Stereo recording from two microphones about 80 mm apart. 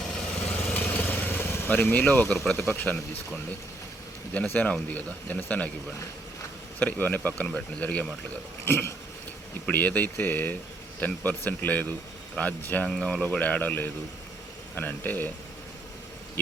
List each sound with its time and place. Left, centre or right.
0.7 s vehicle: centre
2.4 s speech: centre
4.4 s speech: centre
6.7 s speech: centre
8.6 s a sound: left
9.6 s speech: left
12.9 s speech: centre
13.2 s speech: centre